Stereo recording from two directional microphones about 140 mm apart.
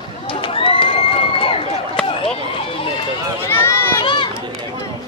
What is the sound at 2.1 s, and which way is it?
Run, 40° left (ahead or behind).